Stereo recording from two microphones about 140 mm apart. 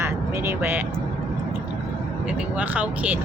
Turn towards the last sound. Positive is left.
turn(degrees=-10)  # may be behind; listen again after turning